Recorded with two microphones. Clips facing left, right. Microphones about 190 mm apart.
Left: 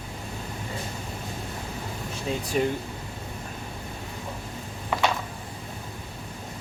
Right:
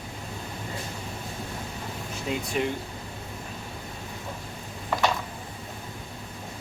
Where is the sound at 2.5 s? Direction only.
40° left (ahead or behind).